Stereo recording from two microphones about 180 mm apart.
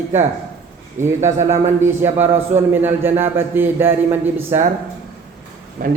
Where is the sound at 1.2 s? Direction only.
40° right (ahead or behind).